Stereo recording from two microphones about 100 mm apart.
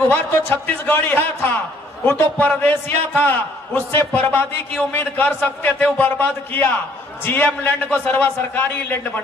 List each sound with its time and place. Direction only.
0.1 s a man's voice: 20° left (ahead or behind)